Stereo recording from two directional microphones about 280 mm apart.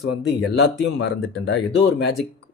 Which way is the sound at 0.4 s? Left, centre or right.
Left.